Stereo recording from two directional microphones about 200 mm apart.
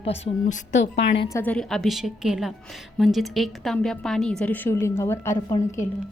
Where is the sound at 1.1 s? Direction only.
15° left (ahead or behind).